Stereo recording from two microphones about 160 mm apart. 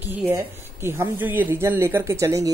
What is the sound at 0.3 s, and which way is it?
Speech, 15° right (ahead or behind).